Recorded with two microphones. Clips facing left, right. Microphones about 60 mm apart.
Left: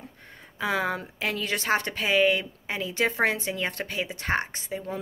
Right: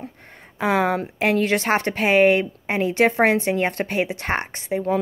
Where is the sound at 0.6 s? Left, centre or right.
Right.